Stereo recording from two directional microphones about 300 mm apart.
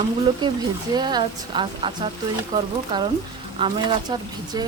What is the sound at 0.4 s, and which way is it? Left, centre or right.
Speech, centre.